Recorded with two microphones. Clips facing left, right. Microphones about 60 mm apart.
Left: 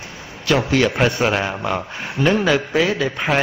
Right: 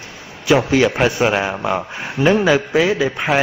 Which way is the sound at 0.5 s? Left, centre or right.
Centre.